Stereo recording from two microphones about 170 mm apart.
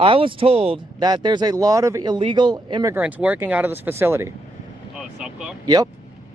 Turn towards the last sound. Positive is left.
turn(degrees=-25)  # may be behind; listen again after turning